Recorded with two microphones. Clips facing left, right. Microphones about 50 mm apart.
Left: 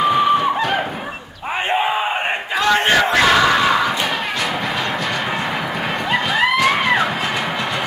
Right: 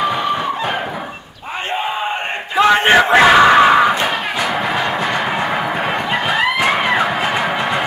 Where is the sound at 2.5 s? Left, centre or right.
Right.